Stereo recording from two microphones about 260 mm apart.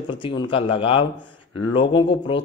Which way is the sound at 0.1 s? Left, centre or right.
Centre.